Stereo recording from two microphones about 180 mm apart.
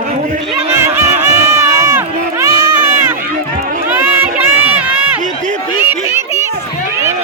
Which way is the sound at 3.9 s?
10° right (ahead or behind).